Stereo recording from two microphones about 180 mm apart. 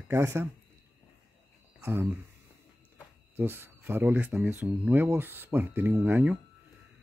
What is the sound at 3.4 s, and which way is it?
Speech, 10° right (ahead or behind).